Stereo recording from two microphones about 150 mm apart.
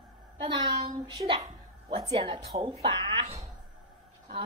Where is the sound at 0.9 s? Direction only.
20° right (ahead or behind).